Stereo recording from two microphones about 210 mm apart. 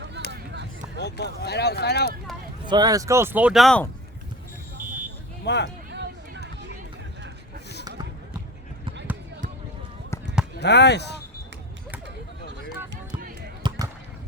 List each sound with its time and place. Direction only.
0.3 s a sound: 55° right (ahead or behind)
0.9 s speech: 50° left (ahead or behind)
2.6 s speech: 20° right (ahead or behind); by 3.8 s centre (ahead or behind)
5.5 s speech: 55° left (ahead or behind)
5.9 s run: 55° right (ahead or behind)
10.6 s speech: 55° left (ahead or behind)
13.6 s basketball bounce: 20° right (ahead or behind)